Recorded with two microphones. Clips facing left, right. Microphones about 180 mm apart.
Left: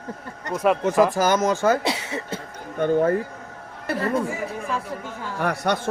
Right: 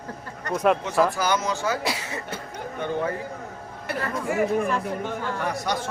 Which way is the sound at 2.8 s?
50° left (ahead or behind).